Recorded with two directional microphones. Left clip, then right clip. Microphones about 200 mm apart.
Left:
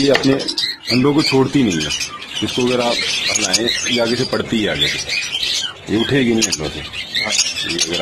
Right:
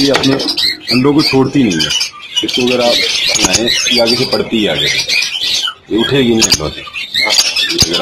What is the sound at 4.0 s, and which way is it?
Speech, 35° left (ahead or behind).